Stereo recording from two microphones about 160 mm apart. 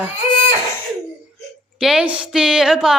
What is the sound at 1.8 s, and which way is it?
A woman's voice, 5° right (ahead or behind).